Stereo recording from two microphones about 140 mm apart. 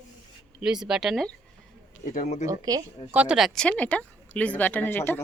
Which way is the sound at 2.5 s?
25° right (ahead or behind).